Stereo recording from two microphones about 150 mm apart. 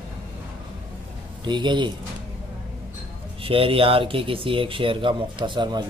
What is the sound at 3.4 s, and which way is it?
Speech, 35° right (ahead or behind).